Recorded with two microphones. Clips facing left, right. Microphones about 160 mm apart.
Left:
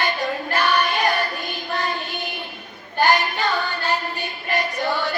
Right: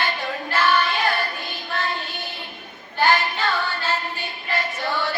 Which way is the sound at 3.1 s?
15° left (ahead or behind).